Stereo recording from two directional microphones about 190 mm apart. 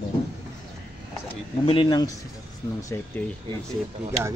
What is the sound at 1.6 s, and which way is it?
Speech, 25° left (ahead or behind).